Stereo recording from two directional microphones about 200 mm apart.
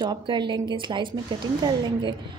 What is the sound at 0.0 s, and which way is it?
A woman's voice, 20° right (ahead or behind).